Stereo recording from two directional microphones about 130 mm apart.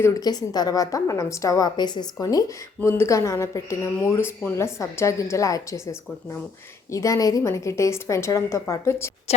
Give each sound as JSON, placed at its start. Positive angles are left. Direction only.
{"t": 0.0, "sound": "a woman's voice", "side_deg": 30}